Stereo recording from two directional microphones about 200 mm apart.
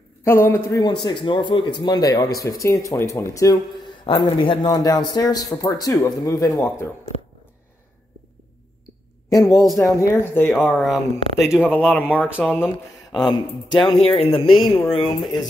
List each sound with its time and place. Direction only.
0.2 s a man's voice: 10° left (ahead or behind)
9.3 s speech: 15° left (ahead or behind)
10.5 s speech: centre (ahead or behind)
13.1 s speech: 20° left (ahead or behind)